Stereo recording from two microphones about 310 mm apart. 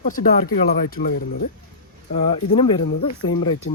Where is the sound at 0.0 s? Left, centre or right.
Left.